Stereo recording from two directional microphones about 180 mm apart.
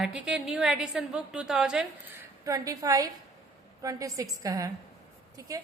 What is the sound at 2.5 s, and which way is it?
A woman's voice, 20° right (ahead or behind).